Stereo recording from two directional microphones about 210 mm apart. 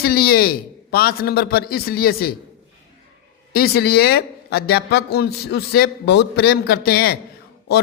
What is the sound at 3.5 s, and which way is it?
A man's voice, 50° left (ahead or behind).